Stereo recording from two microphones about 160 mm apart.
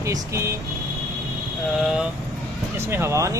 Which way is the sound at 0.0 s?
20° right (ahead or behind).